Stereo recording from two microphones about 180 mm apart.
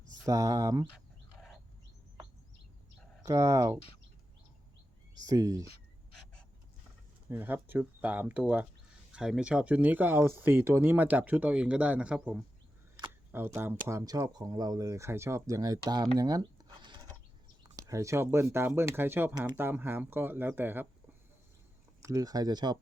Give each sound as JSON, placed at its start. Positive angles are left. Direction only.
{"t": 0.3, "sound": "speech", "side_deg": -20}
{"t": 3.2, "sound": "speech", "side_deg": -15}
{"t": 5.2, "sound": "speech", "side_deg": -20}
{"t": 7.3, "sound": "speech", "side_deg": -10}
{"t": 22.0, "sound": "speech", "side_deg": -20}